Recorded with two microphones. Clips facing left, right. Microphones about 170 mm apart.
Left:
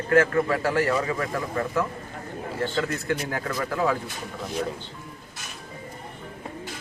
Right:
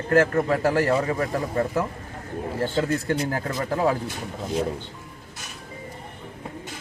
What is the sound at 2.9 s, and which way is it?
A man's voice, 30° right (ahead or behind).